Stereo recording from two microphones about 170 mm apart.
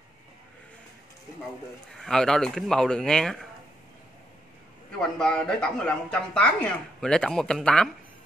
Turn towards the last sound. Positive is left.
turn(degrees=5)  # may be behind; listen again after turning